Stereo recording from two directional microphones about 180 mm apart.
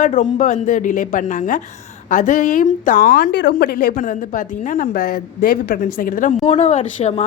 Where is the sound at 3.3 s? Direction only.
75° left (ahead or behind).